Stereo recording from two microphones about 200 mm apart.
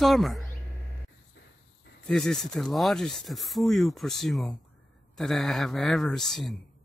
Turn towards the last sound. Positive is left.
turn(degrees=0)  # may be behind; listen again after turning